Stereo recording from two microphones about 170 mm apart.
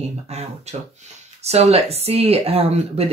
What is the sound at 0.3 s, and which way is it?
Speech, 40° right (ahead or behind).